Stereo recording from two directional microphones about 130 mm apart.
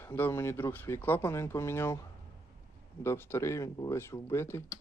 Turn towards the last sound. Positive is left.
turn(degrees=20)  # may be behind; listen again after turning